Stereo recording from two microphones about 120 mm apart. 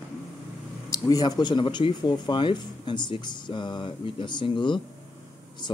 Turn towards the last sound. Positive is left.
turn(degrees=40)  # may be behind; listen again after turning